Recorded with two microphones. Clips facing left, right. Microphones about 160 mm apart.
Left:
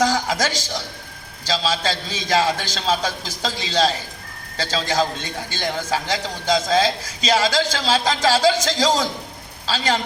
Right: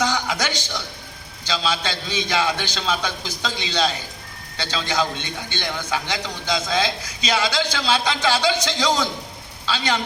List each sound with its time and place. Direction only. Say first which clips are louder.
0.0 s a sound: left 3 dB; 40° left (ahead or behind)
1.5 s a man's voice: left 2 dB; 40° left (ahead or behind)
9.6 s a man's voice: left 2 dB; 40° left (ahead or behind)